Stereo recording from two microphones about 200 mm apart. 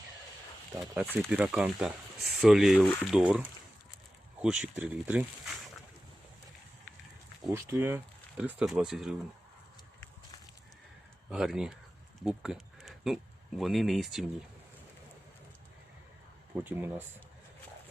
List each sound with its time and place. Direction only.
1.0 s speech: centre (ahead or behind)
7.4 s speech: 10° right (ahead or behind)
11.3 s speech: 5° right (ahead or behind)
12.2 s sheep: 5° right (ahead or behind)
13.6 s speech: centre (ahead or behind)
16.6 s speech: 10° right (ahead or behind)